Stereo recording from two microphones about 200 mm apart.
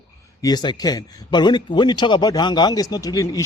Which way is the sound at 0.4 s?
20° left (ahead or behind).